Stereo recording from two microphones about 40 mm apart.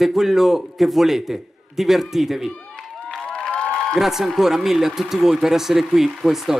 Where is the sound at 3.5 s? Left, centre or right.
Left.